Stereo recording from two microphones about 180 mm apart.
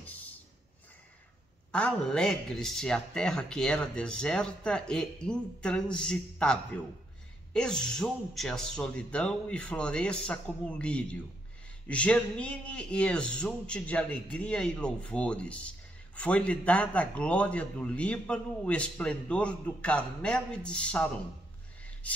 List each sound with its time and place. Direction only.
1.7 s a man's voice: 5° left (ahead or behind)